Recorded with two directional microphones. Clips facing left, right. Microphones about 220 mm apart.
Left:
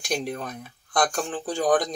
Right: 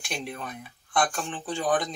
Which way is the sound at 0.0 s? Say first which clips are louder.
Left 6 dB; 40° left (ahead or behind).